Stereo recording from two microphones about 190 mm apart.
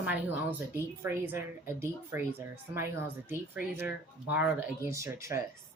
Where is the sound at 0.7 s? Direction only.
10° right (ahead or behind).